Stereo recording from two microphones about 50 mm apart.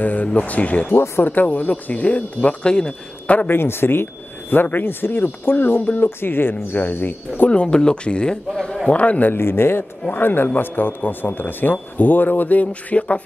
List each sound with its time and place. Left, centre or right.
0.0 s speech: left
0.8 s speech: left
1.2 s speech: left; by 2.9 s centre
3.4 s speech: left
7.4 s speech: left
9.3 s speech: left
10.0 s a man's voice: left